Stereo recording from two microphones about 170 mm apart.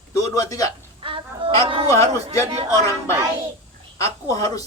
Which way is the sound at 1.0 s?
30° right (ahead or behind).